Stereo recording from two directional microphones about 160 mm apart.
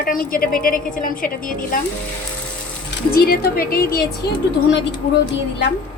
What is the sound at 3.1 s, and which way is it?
Speech, 70° left (ahead or behind).